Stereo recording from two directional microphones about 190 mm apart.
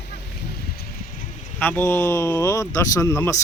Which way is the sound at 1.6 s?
10° left (ahead or behind).